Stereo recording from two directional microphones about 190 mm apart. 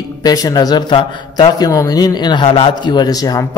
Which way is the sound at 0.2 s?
20° left (ahead or behind).